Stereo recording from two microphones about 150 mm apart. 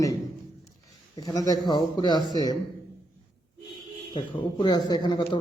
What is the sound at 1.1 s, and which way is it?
A man's voice, 25° left (ahead or behind).